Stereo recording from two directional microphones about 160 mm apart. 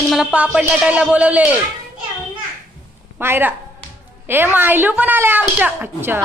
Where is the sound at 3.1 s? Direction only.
15° right (ahead or behind).